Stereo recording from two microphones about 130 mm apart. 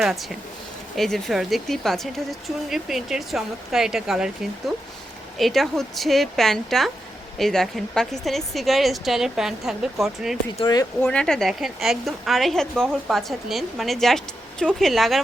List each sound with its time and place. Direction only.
0.0 s a woman's voice: 5° right (ahead or behind)
5.4 s a woman's voice: centre (ahead or behind)
10.6 s speech: 30° left (ahead or behind)
11.0 s a woman's voice: 5° left (ahead or behind)